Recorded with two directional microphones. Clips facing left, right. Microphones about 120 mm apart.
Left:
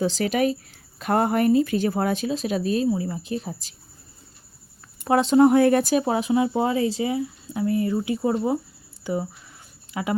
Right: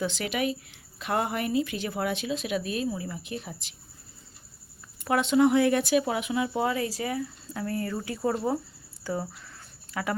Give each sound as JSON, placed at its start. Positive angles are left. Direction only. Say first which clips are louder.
{"t": 0.0, "sound": "speech", "louder": "left 7 dB", "side_deg": 35}
{"t": 5.0, "sound": "speech", "louder": "left 6 dB", "side_deg": 35}